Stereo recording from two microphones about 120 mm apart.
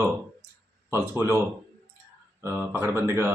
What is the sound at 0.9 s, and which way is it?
Speech, 20° right (ahead or behind).